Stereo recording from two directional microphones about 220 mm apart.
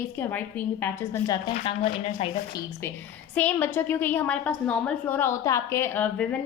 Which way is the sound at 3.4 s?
10° left (ahead or behind).